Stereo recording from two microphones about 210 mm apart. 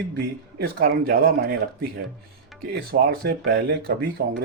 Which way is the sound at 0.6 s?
45° right (ahead or behind).